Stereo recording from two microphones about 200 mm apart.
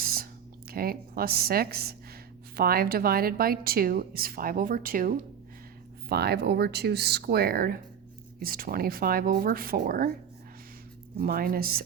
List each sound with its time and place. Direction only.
0.0 s a sound: 45° right (ahead or behind)
0.7 s a woman's voice: 50° right (ahead or behind)
11.2 s a woman's voice: 45° right (ahead or behind)